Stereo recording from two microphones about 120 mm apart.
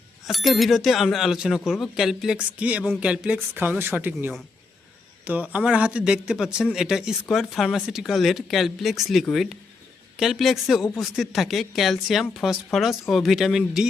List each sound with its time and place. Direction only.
0.3 s speech: centre (ahead or behind)